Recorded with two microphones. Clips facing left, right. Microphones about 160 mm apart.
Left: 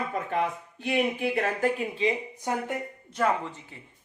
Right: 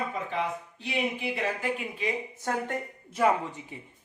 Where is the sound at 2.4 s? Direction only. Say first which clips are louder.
Left 1 dB; 15° left (ahead or behind).